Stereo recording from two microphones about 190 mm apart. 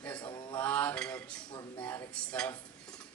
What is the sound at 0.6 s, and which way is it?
Speech, 10° left (ahead or behind).